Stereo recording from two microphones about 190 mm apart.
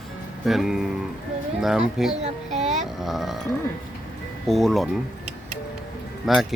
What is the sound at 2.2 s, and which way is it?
Speech, 35° right (ahead or behind).